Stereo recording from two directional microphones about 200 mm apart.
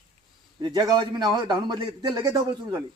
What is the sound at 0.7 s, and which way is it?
A man's voice, 20° right (ahead or behind).